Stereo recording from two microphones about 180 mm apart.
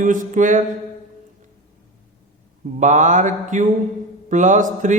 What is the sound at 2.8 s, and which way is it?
A man's voice, 45° right (ahead or behind).